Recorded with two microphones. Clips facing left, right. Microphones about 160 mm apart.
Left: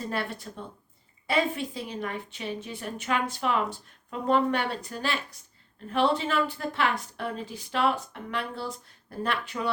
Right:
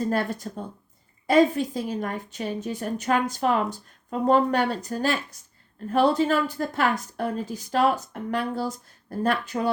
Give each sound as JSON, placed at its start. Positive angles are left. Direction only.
{"t": 0.0, "sound": "a woman's voice", "side_deg": -45}